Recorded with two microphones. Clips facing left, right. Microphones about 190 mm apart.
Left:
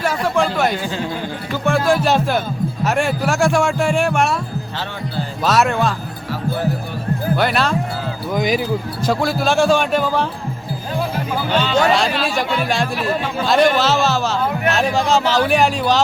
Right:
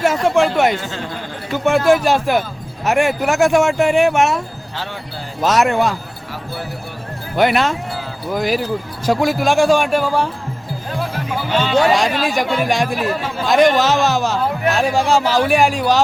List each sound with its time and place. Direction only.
0.0 s speech: 25° right (ahead or behind)
5.4 s speech: 15° right (ahead or behind)
7.3 s speech: 15° right (ahead or behind)
8.3 s speech: 5° right (ahead or behind)
9.0 s speech: 15° right (ahead or behind)
11.6 s speech: 15° right (ahead or behind)